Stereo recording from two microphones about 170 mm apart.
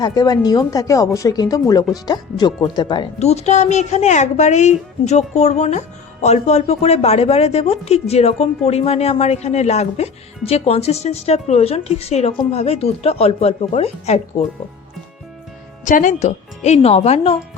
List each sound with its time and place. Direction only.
0.0 s speech: 20° left (ahead or behind); by 14.4 s 40° left (ahead or behind)
15.8 s speech: 50° left (ahead or behind)